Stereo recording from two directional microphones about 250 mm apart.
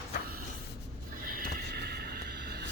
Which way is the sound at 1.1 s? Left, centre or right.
Right.